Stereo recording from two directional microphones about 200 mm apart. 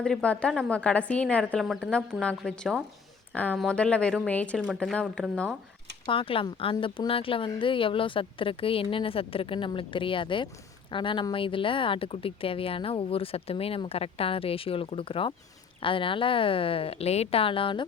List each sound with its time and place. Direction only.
0.0 s a woman's voice: 5° left (ahead or behind)
6.1 s a woman's voice: 25° left (ahead or behind)